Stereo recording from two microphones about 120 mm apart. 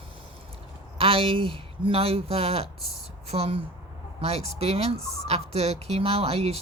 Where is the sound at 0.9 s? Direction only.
50° right (ahead or behind).